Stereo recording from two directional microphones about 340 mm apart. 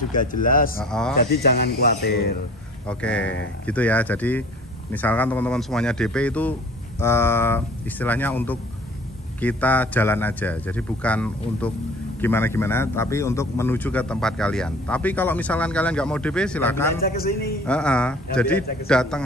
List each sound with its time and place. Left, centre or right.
0.1 s speech: left
0.7 s a man's voice: centre
1.3 s speech: left
2.9 s a man's voice: centre
17.0 s speech: left
17.6 s a man's voice: centre